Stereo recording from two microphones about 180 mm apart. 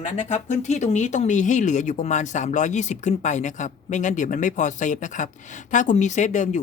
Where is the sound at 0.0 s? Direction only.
40° left (ahead or behind).